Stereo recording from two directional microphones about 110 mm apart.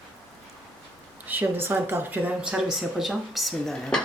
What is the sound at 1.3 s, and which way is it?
Speech, 20° right (ahead or behind).